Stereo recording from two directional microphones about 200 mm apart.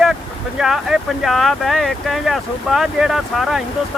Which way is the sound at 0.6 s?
Centre (ahead or behind).